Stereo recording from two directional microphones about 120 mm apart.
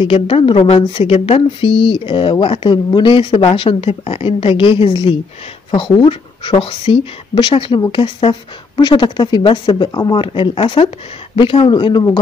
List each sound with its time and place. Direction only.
0.0 s speech: 50° left (ahead or behind)